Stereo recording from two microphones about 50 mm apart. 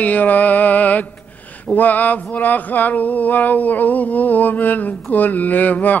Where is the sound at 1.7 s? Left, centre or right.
Left.